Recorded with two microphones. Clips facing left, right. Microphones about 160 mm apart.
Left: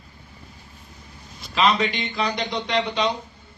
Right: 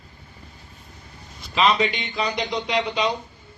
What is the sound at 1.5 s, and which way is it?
A man's voice, centre (ahead or behind).